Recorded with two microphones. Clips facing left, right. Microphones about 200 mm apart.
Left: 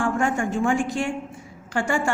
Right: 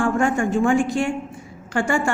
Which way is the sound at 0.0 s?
50° right (ahead or behind).